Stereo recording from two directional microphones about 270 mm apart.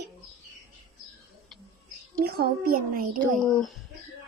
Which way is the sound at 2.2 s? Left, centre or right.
Right.